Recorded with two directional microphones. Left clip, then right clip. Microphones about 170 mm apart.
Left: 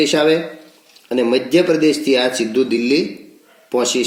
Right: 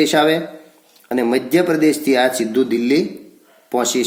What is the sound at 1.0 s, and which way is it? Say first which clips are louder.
A man's voice: left 2 dB; 20° right (ahead or behind).